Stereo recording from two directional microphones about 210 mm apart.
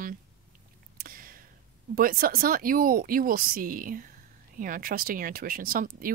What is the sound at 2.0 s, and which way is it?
Speech, 45° right (ahead or behind).